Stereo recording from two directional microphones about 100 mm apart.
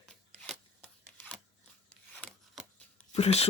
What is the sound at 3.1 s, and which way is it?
Speech, 90° left.